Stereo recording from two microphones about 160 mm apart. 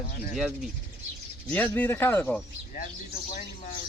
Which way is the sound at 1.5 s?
10° left (ahead or behind).